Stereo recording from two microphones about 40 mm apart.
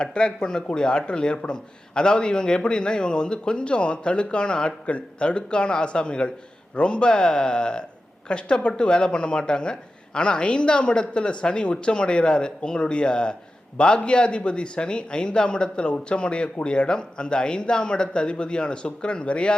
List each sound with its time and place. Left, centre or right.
0.0 s a man's voice: left